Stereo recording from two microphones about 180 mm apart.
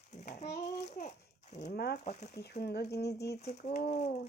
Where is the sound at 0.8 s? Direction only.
40° left (ahead or behind).